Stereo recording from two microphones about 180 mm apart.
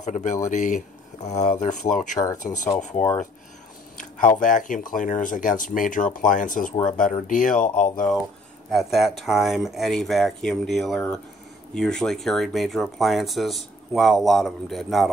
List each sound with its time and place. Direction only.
0.0 s speech: 45° left (ahead or behind)
4.4 s speech: 45° left (ahead or behind)
8.7 s speech: centre (ahead or behind)